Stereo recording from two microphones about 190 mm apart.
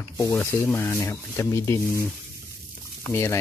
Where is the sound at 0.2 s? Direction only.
15° left (ahead or behind).